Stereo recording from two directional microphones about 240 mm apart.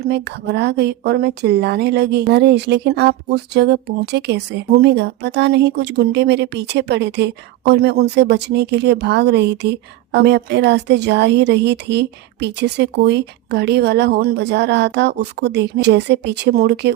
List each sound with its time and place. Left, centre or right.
0.0 s a woman's voice: right